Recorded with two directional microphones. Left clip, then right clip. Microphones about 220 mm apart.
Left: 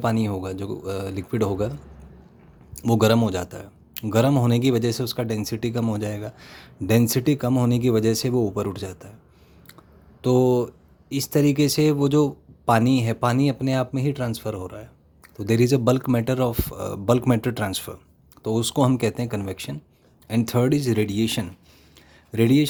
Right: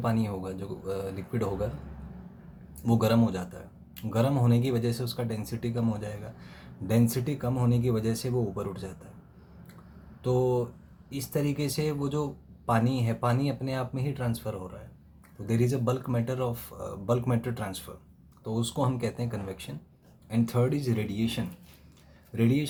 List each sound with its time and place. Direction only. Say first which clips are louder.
0.0 s a man's voice: left 7 dB; 45° left (ahead or behind)
2.8 s a man's voice: left 7 dB; 40° left (ahead or behind)
10.2 s a man's voice: left 7 dB; 45° left (ahead or behind)